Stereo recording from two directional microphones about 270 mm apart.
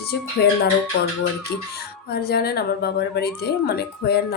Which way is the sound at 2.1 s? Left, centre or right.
Left.